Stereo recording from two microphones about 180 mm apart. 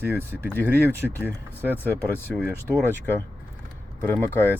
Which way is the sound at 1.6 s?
10° left (ahead or behind).